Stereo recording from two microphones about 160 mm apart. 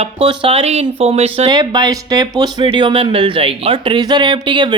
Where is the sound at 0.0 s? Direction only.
35° right (ahead or behind).